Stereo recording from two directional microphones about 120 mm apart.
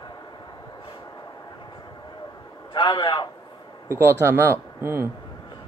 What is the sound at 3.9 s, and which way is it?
Speech, 20° right (ahead or behind).